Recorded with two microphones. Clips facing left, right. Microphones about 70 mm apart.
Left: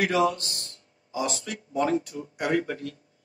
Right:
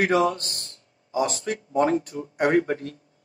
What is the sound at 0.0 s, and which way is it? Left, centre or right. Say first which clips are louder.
Speech: right 2 dB; right.